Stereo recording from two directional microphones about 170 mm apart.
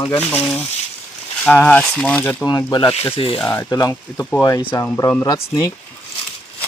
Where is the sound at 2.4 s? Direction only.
25° left (ahead or behind).